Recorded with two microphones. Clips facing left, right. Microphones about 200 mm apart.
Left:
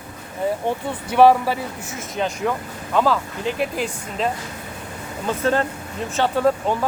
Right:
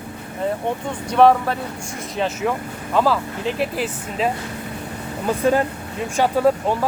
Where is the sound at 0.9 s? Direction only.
5° left (ahead or behind).